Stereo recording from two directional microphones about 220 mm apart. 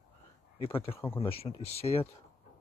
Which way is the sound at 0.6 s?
25° left (ahead or behind).